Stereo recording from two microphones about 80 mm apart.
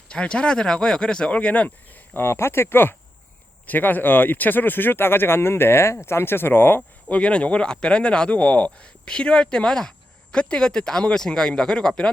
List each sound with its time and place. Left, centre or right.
0.1 s speech: centre
7.1 s speech: centre